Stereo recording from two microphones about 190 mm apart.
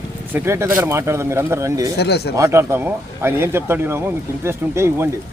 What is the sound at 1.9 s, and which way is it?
Speech, 60° left (ahead or behind).